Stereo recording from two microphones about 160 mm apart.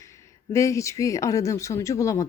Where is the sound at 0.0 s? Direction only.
20° left (ahead or behind).